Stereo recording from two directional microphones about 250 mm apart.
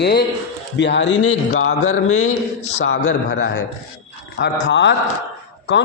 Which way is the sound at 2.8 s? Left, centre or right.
Left.